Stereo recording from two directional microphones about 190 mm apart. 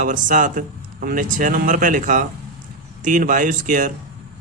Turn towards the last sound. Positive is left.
turn(degrees=-45)  # may be behind; listen again after turning